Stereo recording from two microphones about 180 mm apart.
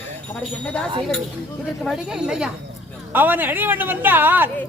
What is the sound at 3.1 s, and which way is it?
Speech, 10° right (ahead or behind).